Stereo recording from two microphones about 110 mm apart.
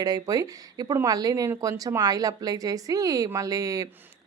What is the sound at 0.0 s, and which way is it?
A woman's voice, 35° right (ahead or behind).